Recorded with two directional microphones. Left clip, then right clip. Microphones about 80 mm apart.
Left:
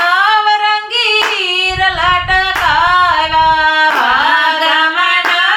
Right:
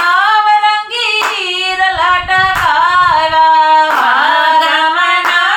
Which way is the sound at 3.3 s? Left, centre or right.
Left.